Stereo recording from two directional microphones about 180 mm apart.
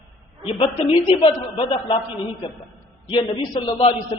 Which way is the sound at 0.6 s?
30° left (ahead or behind).